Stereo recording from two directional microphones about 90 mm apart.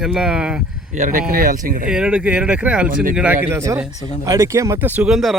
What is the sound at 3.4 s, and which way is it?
A man's voice, 30° right (ahead or behind).